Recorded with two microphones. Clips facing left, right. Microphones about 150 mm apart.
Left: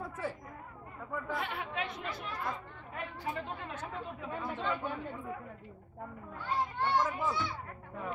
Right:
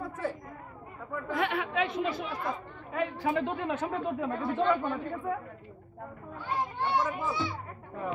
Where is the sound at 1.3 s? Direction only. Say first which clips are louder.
Right 9 dB; 85° right.